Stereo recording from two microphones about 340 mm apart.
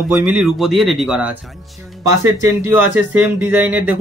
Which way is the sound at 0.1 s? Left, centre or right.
Centre.